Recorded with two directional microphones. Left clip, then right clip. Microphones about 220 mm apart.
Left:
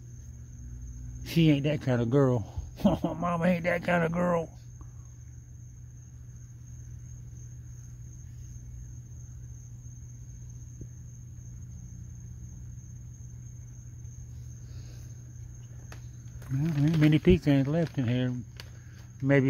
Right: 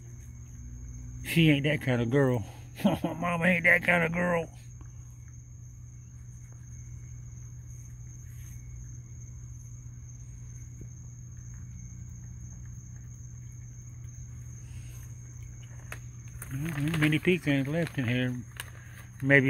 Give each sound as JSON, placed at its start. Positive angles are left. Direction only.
{"t": 1.2, "sound": "speech", "side_deg": 0}
{"t": 16.5, "sound": "speech", "side_deg": 30}
{"t": 17.0, "sound": "speech", "side_deg": 15}